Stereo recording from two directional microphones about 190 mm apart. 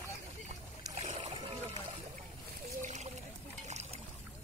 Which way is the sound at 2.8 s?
40° right (ahead or behind).